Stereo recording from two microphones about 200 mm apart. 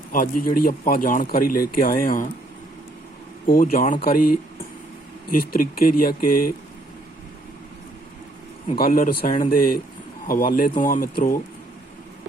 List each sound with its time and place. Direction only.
0.1 s a man's voice: 45° left (ahead or behind)
3.4 s a man's voice: 45° left (ahead or behind)
5.4 s a man's voice: 50° left (ahead or behind)
8.8 s a man's voice: 45° left (ahead or behind)